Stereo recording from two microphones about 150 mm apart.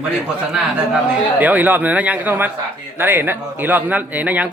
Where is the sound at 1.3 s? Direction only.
10° right (ahead or behind).